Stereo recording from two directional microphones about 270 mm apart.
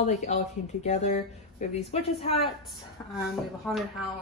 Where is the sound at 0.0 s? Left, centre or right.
Left.